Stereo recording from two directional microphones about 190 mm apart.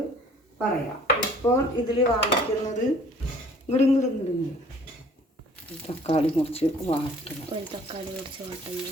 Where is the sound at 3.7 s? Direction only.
35° left (ahead or behind).